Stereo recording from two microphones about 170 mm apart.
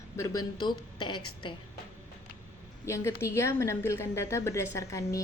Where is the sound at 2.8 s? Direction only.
15° left (ahead or behind).